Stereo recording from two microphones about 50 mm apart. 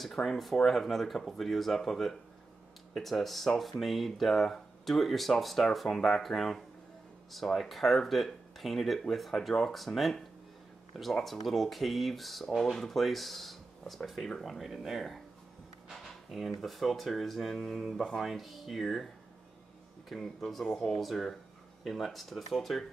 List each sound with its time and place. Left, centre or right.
0.0 s speech: centre
11.2 s speech: centre
20.1 s speech: centre